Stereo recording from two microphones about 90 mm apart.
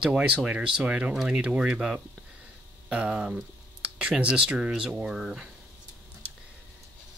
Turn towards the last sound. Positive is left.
turn(degrees=0)  # may be behind; listen again after turning